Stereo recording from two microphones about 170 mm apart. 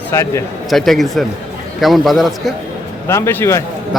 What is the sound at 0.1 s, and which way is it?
Speech, 20° left (ahead or behind).